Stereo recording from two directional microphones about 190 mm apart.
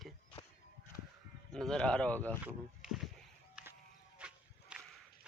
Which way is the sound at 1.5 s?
5° left (ahead or behind).